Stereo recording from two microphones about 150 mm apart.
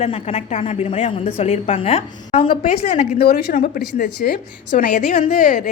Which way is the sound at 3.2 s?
80° left.